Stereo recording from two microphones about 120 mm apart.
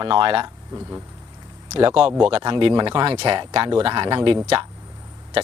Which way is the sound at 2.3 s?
45° right (ahead or behind).